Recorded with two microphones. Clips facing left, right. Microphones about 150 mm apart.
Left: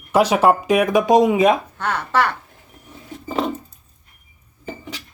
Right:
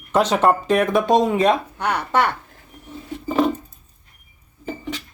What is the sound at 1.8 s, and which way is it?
Speech, 15° right (ahead or behind).